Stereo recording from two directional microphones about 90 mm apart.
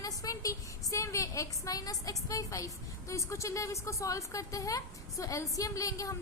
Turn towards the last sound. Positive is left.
turn(degrees=40)  # may be behind; listen again after turning